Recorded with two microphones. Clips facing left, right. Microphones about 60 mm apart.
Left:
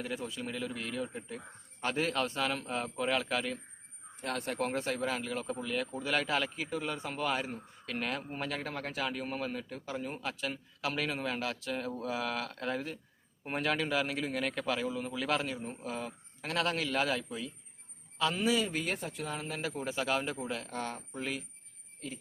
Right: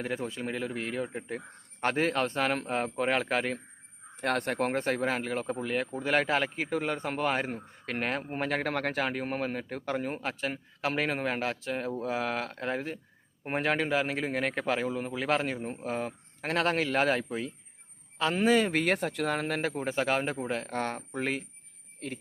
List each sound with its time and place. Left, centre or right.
0.0 s speech: right
4.2 s speech: right
6.7 s speech: right